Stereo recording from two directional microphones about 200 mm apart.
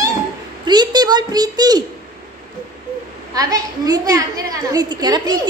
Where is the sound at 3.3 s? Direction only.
20° right (ahead or behind).